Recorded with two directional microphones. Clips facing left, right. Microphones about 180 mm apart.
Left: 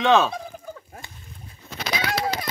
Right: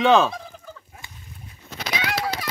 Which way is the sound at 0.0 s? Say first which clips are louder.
Right 2 dB; centre (ahead or behind).